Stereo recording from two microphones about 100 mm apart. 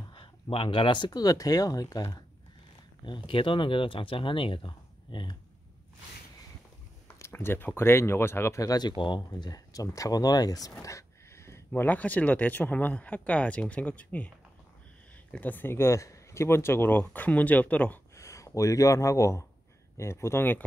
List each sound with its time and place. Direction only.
0.1 s speech: 60° left (ahead or behind); by 2.2 s 40° left (ahead or behind)
3.1 s speech: 55° left (ahead or behind)
7.2 s speech: 25° left (ahead or behind); by 9.2 s 50° left (ahead or behind)
9.3 s speech: 40° left (ahead or behind); by 14.3 s 15° left (ahead or behind)
15.3 s speech: 15° left (ahead or behind)
18.1 s speech: 30° left (ahead or behind)